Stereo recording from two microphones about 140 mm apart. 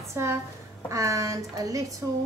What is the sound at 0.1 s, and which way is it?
A woman's voice, 20° right (ahead or behind).